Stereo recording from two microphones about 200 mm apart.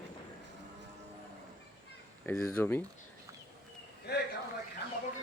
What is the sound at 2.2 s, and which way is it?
Speech, 10° left (ahead or behind).